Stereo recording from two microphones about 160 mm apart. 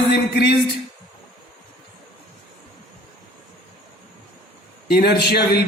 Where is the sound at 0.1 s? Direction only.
90° left.